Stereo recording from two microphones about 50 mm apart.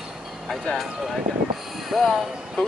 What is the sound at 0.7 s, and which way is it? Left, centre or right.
Speech, left.